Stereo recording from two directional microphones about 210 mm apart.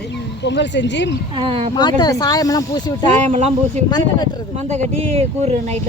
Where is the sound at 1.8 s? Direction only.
20° left (ahead or behind).